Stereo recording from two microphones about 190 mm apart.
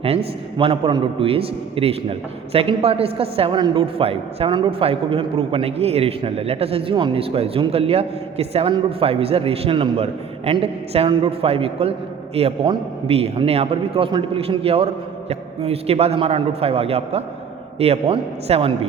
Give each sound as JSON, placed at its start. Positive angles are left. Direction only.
{"t": 0.0, "sound": "a man's voice", "side_deg": -30}